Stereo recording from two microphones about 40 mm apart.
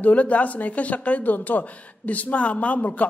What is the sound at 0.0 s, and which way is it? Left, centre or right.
A woman's voice, left.